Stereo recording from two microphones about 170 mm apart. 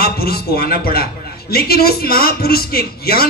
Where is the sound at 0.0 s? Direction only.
65° left (ahead or behind).